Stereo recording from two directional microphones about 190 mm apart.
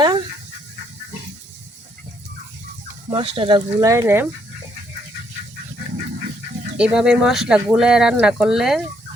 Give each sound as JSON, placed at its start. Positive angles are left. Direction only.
{"t": 0.0, "sound": "dog", "side_deg": -20}
{"t": 3.1, "sound": "speech", "side_deg": -25}
{"t": 6.7, "sound": "speech", "side_deg": -5}